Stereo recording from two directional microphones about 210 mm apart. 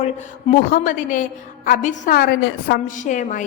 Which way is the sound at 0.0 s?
35° left (ahead or behind).